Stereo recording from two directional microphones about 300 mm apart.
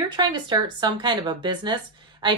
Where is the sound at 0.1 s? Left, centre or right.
Centre.